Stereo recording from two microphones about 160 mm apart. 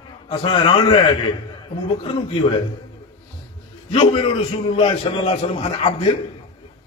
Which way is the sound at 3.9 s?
40° left (ahead or behind).